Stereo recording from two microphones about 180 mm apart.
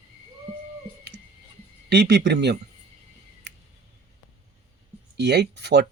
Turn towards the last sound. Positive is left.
turn(degrees=-70)  # may be behind; listen again after turning